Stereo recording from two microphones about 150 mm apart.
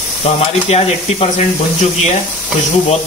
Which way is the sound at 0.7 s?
45° left (ahead or behind).